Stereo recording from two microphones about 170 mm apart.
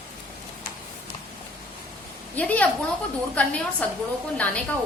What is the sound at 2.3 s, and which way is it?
A woman's voice, 10° left (ahead or behind).